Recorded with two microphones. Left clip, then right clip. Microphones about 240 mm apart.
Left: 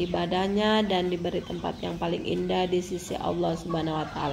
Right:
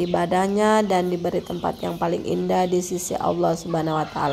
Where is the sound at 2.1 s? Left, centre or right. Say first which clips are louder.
Right 5 dB; right.